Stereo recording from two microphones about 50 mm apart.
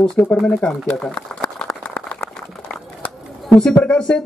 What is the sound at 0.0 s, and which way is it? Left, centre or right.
Speech, centre.